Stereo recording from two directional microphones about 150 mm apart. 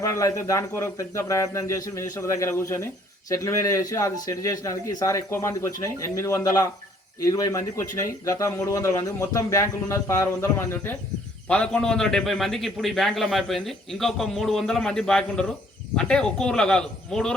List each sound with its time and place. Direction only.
0.0 s speech: 20° left (ahead or behind)
11.4 s a man's voice: 5° left (ahead or behind)